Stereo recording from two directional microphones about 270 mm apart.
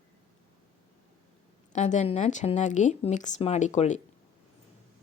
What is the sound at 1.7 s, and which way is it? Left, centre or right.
A woman's voice, left.